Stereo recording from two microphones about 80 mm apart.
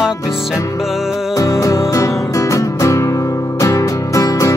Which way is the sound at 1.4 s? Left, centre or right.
Left.